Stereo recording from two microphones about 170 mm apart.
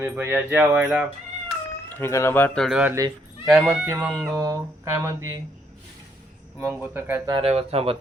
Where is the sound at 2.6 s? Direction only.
5° right (ahead or behind).